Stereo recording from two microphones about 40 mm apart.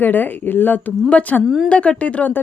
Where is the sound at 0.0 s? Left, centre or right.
Left.